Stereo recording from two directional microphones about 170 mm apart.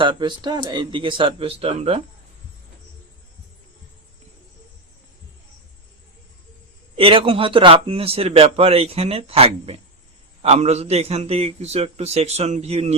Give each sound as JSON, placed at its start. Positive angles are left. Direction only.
{"t": 0.0, "sound": "speech", "side_deg": -25}
{"t": 6.9, "sound": "speech", "side_deg": -30}